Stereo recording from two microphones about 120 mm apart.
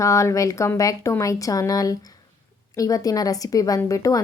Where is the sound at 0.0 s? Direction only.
25° left (ahead or behind).